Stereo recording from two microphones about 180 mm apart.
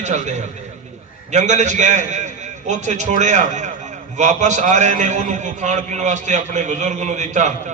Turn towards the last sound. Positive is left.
turn(degrees=-40)  # may be behind; listen again after turning